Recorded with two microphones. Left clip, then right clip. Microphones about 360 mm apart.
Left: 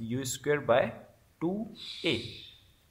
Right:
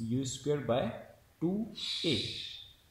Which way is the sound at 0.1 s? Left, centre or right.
Left.